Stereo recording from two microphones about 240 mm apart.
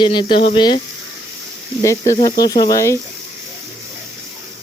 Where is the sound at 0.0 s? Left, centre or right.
Centre.